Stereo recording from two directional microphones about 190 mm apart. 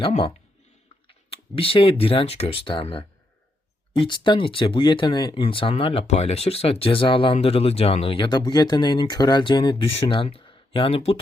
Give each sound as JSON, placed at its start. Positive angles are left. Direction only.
{"t": 0.0, "sound": "speech", "side_deg": 30}